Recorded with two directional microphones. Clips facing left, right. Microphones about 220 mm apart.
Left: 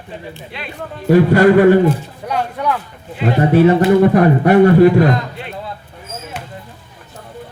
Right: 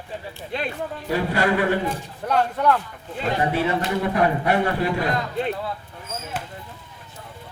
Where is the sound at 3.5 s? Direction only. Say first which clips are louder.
Left 12 dB; 45° left (ahead or behind).